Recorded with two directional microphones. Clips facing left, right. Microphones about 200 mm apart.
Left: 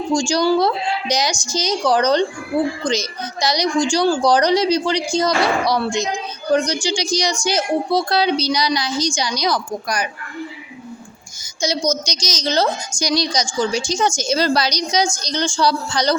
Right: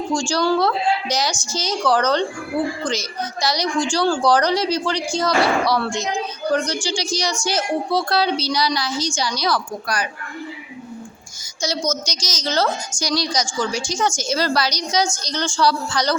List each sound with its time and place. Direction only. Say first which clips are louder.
0.1 s a woman's voice: left 3 dB; 15° left (ahead or behind)
11.6 s a woman's voice: left 3 dB; 15° left (ahead or behind)